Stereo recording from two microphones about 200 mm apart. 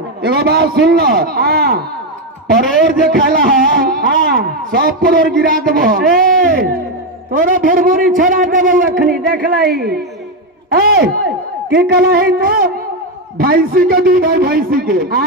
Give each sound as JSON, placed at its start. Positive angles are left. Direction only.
{"t": 0.2, "sound": "speech", "side_deg": -50}
{"t": 3.2, "sound": "speech", "side_deg": -45}